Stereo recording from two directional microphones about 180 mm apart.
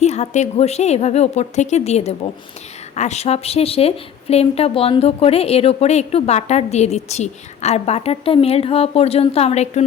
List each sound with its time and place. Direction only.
0.0 s a woman's voice: 40° left (ahead or behind)